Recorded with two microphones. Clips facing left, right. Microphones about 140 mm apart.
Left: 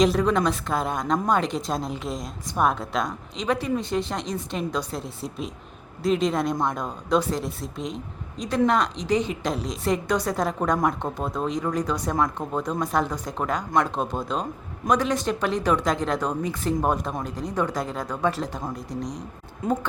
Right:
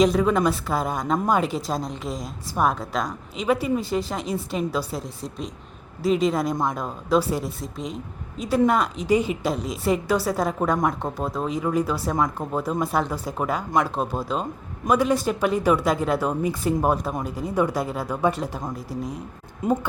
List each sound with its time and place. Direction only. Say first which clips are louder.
0.0 s a woman's voice: right 1 dB; centre (ahead or behind)